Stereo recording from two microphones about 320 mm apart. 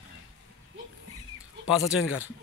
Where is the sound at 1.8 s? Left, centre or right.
Centre.